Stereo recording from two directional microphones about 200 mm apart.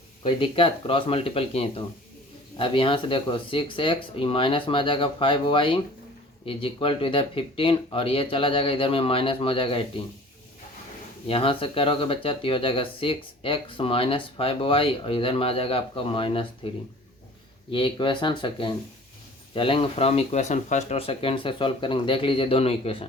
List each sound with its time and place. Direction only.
0.2 s speech: 25° left (ahead or behind)
11.3 s speech: 25° left (ahead or behind)
17.7 s speech: 25° left (ahead or behind)